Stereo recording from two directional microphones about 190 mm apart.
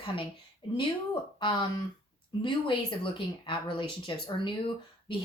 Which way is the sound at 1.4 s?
25° left (ahead or behind).